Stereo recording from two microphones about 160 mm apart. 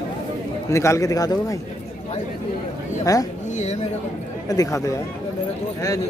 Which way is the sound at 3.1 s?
20° left (ahead or behind).